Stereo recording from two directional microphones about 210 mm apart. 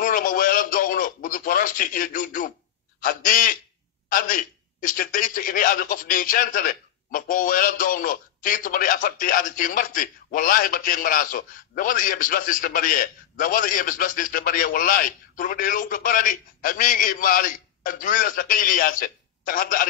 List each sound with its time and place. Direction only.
0.0 s radio: 40° left (ahead or behind)
3.0 s a man's voice: 40° left (ahead or behind)